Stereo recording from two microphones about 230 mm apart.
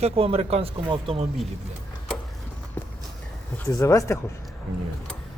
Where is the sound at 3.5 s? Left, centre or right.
Centre.